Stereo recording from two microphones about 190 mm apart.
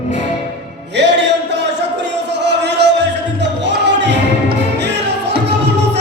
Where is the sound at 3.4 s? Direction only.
65° right (ahead or behind).